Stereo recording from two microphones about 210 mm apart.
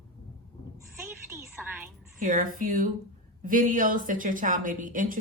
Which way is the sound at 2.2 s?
40° right (ahead or behind).